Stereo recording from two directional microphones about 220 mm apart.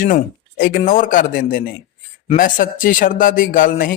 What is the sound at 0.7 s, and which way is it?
A man's voice, 35° left (ahead or behind).